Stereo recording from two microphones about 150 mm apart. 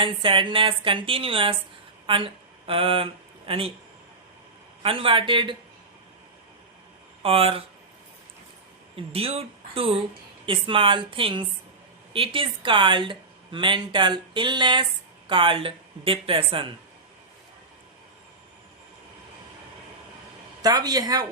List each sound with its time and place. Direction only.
0.0 s speech: 35° right (ahead or behind)
4.8 s speech: 35° right (ahead or behind)
7.2 s speech: 40° right (ahead or behind)
9.0 s speech: 40° right (ahead or behind)
20.6 s a man's voice: 25° right (ahead or behind)